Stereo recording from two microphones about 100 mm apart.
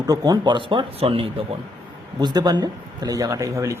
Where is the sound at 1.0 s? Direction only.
65° right (ahead or behind).